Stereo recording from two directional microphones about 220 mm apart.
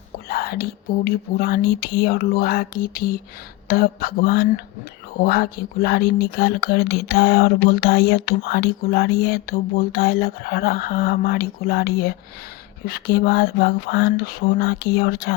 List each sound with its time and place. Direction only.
0.3 s speech: 45° left (ahead or behind)